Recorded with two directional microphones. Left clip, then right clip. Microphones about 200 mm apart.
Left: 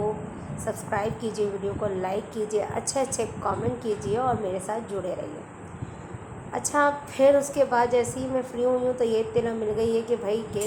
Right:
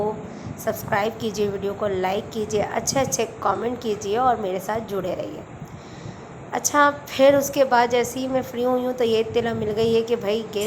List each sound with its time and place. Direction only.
0.6 s a woman's voice: 15° right (ahead or behind)
6.5 s a woman's voice: 15° right (ahead or behind)